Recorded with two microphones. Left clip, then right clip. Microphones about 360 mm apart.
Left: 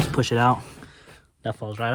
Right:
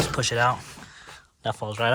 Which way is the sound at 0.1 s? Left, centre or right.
Centre.